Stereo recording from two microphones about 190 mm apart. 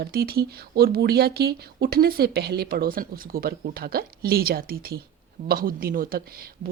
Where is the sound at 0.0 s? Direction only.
55° right (ahead or behind).